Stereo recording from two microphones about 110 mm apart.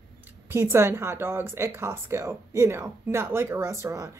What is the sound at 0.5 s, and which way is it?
Speech, 25° right (ahead or behind).